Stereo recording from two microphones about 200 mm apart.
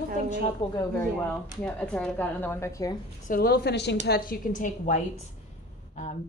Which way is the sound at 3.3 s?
50° left (ahead or behind).